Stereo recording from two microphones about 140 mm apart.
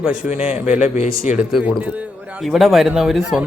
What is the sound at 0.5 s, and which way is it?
Speech, 55° left (ahead or behind).